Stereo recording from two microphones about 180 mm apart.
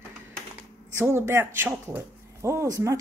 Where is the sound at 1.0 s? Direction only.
15° right (ahead or behind).